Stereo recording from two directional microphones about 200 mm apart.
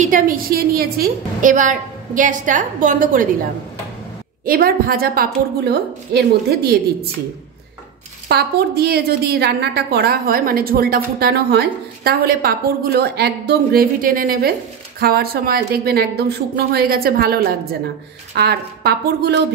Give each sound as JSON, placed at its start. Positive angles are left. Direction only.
{"t": 0.0, "sound": "a woman's voice", "side_deg": -40}
{"t": 4.5, "sound": "a woman's voice", "side_deg": -45}
{"t": 8.3, "sound": "a woman's voice", "side_deg": -55}